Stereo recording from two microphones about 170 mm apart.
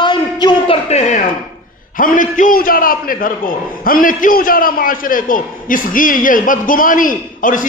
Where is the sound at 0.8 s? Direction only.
40° left (ahead or behind).